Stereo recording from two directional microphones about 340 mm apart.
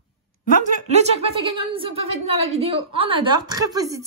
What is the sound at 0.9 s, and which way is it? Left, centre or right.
A woman's voice, centre.